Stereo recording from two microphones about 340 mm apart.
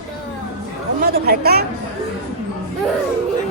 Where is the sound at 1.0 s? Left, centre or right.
Right.